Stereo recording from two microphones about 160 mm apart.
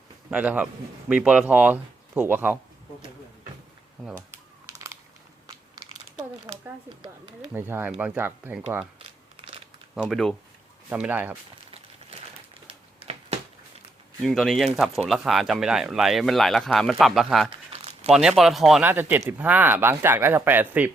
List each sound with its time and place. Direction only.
0.3 s a man's voice: 10° right (ahead or behind)
7.5 s a man's voice: 15° right (ahead or behind)
9.0 s crumpling: 35° right (ahead or behind)
9.9 s a man's voice: centre (ahead or behind)
12.6 s a sound: 40° right (ahead or behind)
14.3 s speech: 5° left (ahead or behind)
17.7 s crumpling: 40° right (ahead or behind)
18.1 s speech: 5° right (ahead or behind)
18.8 s a man's voice: 10° right (ahead or behind)